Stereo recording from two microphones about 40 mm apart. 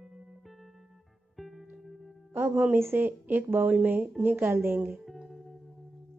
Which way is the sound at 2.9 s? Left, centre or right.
Right.